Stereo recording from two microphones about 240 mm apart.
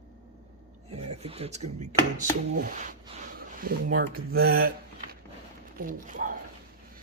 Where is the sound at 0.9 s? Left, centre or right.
Right.